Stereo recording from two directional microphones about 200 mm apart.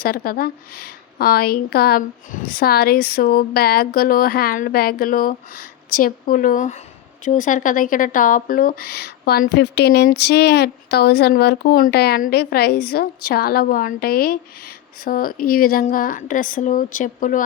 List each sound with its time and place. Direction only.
0.0 s speech: 45° left (ahead or behind)